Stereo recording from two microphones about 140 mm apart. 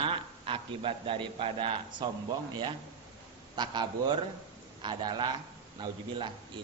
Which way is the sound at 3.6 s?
30° right (ahead or behind).